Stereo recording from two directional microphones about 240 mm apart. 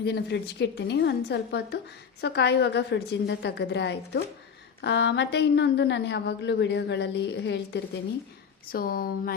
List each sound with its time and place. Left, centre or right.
0.0 s a woman's voice: left